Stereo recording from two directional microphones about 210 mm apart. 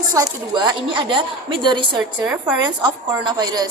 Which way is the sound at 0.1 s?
20° right (ahead or behind).